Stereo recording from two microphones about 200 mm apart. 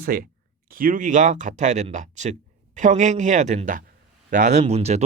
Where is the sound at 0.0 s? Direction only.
50° right (ahead or behind).